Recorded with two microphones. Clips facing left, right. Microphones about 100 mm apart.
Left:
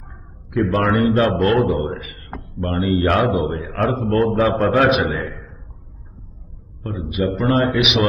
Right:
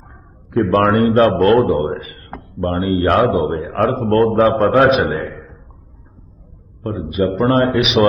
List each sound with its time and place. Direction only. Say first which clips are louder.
0.5 s a man's voice: right 4 dB; 45° right (ahead or behind)
4.5 s a man's voice: right 3 dB; 30° right (ahead or behind)
6.8 s a man's voice: right 4 dB; 35° right (ahead or behind)